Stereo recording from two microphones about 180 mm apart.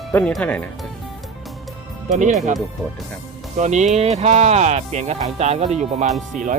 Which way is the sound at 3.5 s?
40° right (ahead or behind).